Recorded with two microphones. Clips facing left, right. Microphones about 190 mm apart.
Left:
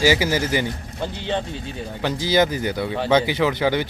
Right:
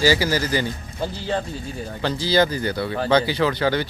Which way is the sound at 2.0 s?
15° left (ahead or behind).